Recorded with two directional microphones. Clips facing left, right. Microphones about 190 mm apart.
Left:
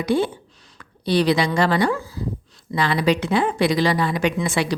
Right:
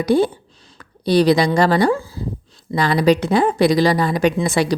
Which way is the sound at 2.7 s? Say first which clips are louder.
Right 4 dB; 40° right (ahead or behind).